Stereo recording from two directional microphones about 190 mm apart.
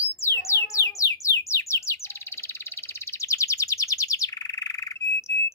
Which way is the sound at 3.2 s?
15° left (ahead or behind).